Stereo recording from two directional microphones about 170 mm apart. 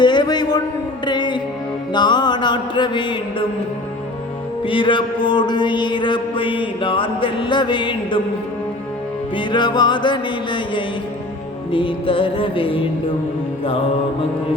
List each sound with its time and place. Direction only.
0.0 s a sound: 25° left (ahead or behind)
1.0 s music: 25° left (ahead or behind)
1.9 s mantra: 25° left (ahead or behind)
4.6 s music: 30° left (ahead or behind)
9.3 s music: 25° left (ahead or behind)